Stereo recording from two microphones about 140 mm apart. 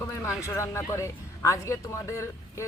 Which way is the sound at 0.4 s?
20° left (ahead or behind).